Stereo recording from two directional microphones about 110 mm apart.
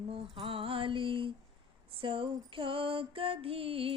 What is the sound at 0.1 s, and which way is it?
Music, 55° right (ahead or behind).